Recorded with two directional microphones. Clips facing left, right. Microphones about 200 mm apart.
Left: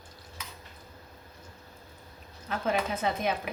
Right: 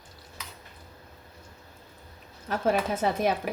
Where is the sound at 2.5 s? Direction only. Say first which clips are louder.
Right 4 dB; 45° right (ahead or behind).